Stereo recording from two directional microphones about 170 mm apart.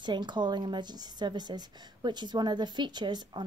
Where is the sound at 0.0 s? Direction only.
25° right (ahead or behind).